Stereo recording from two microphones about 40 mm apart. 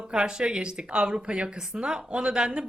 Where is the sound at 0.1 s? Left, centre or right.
Right.